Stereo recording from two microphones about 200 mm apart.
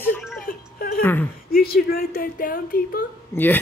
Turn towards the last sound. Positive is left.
turn(degrees=10)  # may be behind; listen again after turning